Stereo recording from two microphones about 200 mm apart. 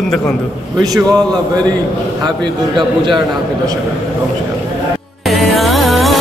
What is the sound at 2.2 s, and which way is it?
Speech, 25° right (ahead or behind).